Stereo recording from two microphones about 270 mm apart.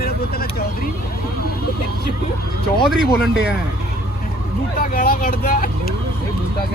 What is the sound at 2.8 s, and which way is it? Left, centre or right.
Speech, centre.